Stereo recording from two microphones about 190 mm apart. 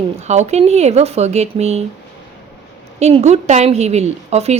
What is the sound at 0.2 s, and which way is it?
Speech, 35° right (ahead or behind).